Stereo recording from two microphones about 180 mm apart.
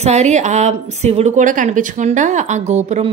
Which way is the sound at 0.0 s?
40° right (ahead or behind).